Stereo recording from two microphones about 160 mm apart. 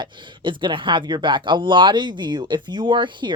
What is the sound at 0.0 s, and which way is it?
Speech, 30° right (ahead or behind).